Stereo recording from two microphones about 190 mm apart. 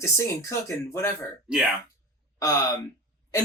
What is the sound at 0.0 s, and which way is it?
Speech, 15° left (ahead or behind).